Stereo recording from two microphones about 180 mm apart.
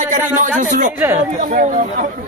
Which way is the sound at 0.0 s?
45° right (ahead or behind).